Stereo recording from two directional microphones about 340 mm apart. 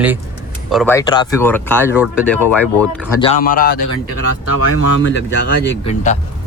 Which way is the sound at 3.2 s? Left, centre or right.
Left.